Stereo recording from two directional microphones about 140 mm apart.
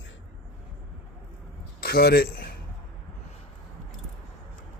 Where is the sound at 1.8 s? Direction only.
90° left.